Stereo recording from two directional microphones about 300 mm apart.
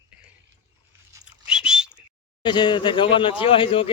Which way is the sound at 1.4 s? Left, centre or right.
Centre.